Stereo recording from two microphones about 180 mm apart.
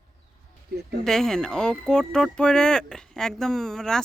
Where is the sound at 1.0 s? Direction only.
5° left (ahead or behind).